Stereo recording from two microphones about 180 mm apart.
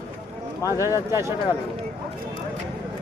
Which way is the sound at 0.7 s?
15° right (ahead or behind).